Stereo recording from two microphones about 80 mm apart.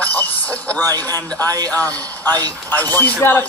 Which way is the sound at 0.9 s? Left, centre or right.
Right.